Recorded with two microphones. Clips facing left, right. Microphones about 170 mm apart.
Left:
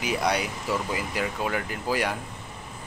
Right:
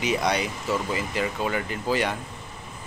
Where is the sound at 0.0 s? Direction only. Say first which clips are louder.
Right 1 dB; 5° left (ahead or behind).